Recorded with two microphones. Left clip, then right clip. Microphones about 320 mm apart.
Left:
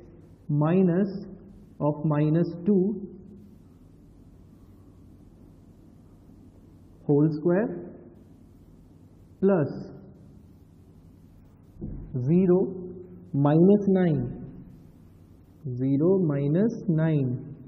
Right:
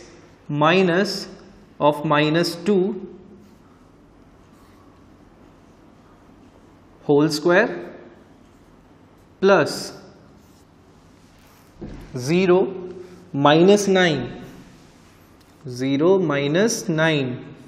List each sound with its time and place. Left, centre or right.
0.5 s a man's voice: centre
7.1 s a man's voice: centre
9.4 s a man's voice: centre
11.8 s speech: centre
12.5 s a sound: centre
13.6 s speech: right
13.9 s a man's voice: centre
16.0 s a man's voice: centre